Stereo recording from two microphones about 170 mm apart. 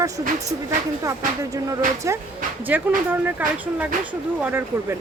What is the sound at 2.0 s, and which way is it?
Speech, 15° right (ahead or behind).